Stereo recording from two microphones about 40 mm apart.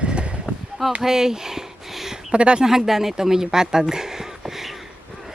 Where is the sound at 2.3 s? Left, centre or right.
Right.